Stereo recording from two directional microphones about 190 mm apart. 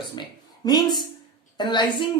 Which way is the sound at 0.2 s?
20° left (ahead or behind).